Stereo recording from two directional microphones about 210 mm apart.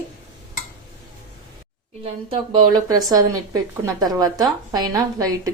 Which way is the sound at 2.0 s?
25° right (ahead or behind).